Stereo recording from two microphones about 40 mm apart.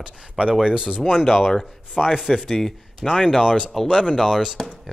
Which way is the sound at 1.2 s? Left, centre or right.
Centre.